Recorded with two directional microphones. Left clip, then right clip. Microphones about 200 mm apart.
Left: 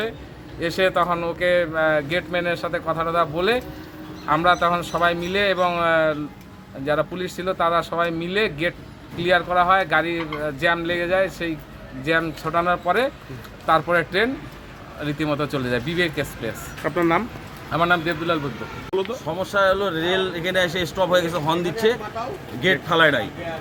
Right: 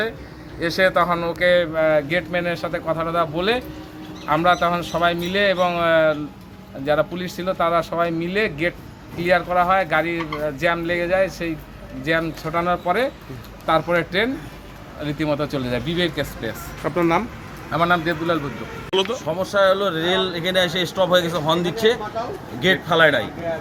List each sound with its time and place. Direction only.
0.8 s speech: centre (ahead or behind)